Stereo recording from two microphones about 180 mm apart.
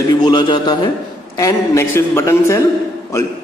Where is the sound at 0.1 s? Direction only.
25° left (ahead or behind).